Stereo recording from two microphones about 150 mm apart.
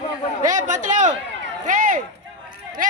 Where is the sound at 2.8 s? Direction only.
65° right (ahead or behind).